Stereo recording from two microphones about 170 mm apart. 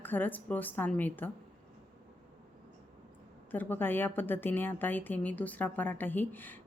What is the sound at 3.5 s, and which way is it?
Speech, 10° left (ahead or behind).